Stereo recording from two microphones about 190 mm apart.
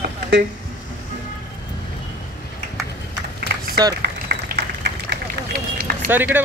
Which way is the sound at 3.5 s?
55° right (ahead or behind).